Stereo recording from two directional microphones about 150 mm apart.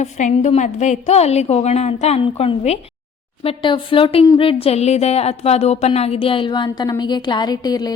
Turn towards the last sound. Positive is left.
turn(degrees=25)  # may be behind; listen again after turning